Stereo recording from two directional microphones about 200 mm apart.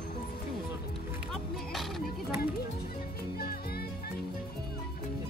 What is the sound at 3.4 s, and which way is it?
Music, 50° left (ahead or behind).